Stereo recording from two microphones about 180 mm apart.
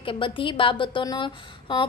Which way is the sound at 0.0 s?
30° left (ahead or behind).